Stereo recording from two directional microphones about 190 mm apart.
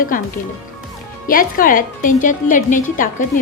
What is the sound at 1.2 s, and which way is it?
A woman's voice, 45° left (ahead or behind).